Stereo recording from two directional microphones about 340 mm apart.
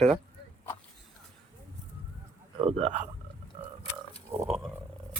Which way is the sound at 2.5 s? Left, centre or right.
Centre.